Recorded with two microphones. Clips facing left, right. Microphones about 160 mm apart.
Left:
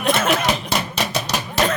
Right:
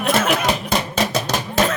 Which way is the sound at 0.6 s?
50° right (ahead or behind).